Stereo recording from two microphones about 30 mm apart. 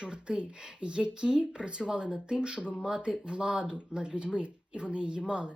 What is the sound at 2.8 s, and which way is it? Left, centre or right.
A woman's voice, right.